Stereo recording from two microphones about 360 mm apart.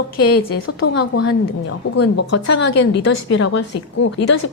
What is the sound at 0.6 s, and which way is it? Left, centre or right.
Speech, left.